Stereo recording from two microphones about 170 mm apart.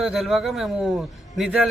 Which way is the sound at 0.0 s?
Centre (ahead or behind).